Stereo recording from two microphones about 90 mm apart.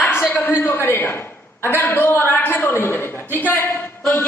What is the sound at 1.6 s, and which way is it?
A man's voice, 25° left (ahead or behind).